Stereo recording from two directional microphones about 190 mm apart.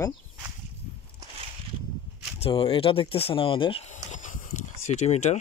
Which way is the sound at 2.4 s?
30° left (ahead or behind).